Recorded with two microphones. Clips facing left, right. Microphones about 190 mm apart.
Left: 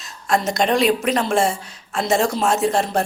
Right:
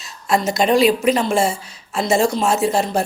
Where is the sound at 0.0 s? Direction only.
5° right (ahead or behind).